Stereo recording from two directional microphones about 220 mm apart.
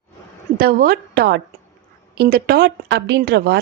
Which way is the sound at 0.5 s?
45° right (ahead or behind).